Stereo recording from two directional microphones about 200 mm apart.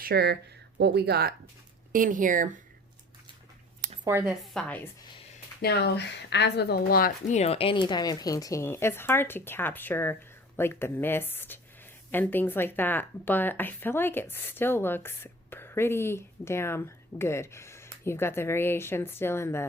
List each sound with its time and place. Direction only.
0.0 s speech: 50° right (ahead or behind)
1.9 s speech: 40° right (ahead or behind)
4.0 s speech: 10° right (ahead or behind)
4.6 s speech: 5° left (ahead or behind)
5.6 s speech: 55° left (ahead or behind); by 19.6 s 10° left (ahead or behind)